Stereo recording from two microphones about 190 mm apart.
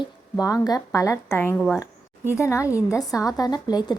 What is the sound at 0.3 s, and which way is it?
A woman's voice, 20° left (ahead or behind).